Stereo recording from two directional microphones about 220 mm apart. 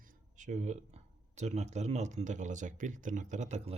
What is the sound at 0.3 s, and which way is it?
Speech, 35° right (ahead or behind).